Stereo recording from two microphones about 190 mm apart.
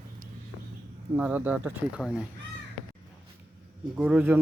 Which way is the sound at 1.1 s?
10° right (ahead or behind).